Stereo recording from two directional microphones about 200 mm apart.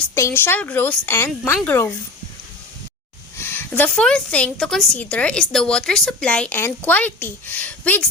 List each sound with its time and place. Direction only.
0.1 s a woman's voice: 10° left (ahead or behind)
3.3 s a woman's voice: 10° left (ahead or behind)